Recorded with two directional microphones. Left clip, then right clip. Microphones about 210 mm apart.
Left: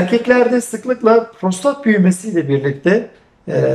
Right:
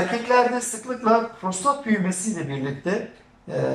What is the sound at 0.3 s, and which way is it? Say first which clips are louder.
Speech: left 5 dB; 45° left (ahead or behind).